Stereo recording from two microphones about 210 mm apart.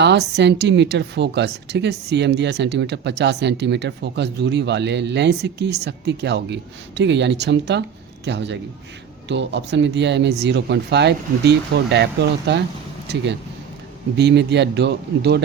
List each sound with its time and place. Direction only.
0.0 s speech: 55° right (ahead or behind)
14.2 s a man's voice: 55° right (ahead or behind)